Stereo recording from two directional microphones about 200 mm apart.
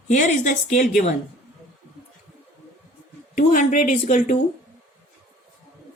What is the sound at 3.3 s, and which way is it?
A woman's voice, 45° left (ahead or behind).